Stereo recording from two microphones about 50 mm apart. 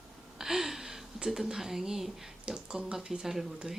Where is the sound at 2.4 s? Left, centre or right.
Centre.